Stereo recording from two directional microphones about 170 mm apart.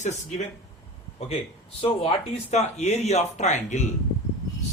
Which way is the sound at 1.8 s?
30° left (ahead or behind).